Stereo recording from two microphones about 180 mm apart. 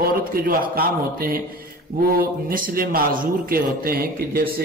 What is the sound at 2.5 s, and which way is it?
A man's voice, 55° right (ahead or behind).